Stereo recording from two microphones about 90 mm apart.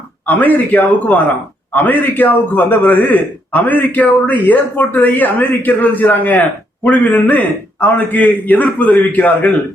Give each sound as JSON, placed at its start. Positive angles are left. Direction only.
{"t": 0.3, "sound": "a man's voice", "side_deg": 20}